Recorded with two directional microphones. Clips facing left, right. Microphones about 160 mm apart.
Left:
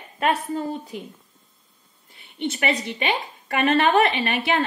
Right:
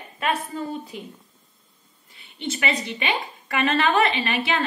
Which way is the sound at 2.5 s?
40° left (ahead or behind).